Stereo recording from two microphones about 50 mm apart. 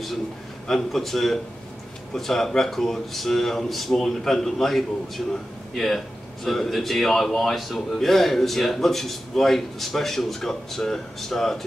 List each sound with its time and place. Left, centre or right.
0.7 s speech: centre